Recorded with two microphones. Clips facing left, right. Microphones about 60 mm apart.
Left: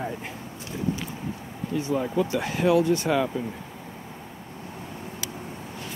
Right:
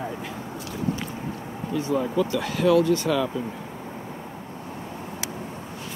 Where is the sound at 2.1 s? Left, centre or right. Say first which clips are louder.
Right 1 dB; left.